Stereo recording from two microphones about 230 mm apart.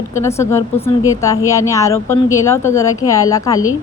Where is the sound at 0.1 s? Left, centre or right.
Centre.